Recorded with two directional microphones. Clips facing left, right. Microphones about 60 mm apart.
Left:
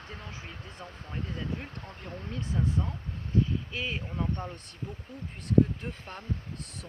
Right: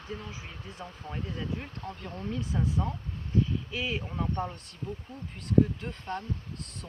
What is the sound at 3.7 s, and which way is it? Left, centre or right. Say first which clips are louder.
Speech: right 2 dB; centre.